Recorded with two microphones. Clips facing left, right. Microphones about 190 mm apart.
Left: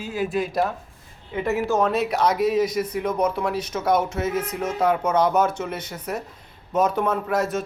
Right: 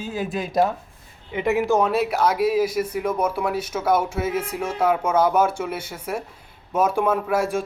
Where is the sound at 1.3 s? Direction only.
15° right (ahead or behind).